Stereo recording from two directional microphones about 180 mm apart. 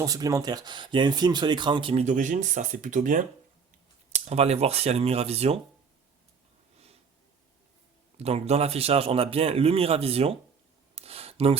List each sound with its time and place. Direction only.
0.0 s speech: 20° right (ahead or behind)
2.0 s speech: 45° right (ahead or behind)
4.3 s a man's voice: 35° right (ahead or behind)
8.2 s a man's voice: 35° right (ahead or behind)
10.9 s a sound: 35° right (ahead or behind)